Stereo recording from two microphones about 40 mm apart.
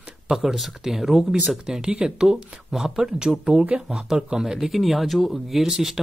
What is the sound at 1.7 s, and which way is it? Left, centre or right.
Speech, right.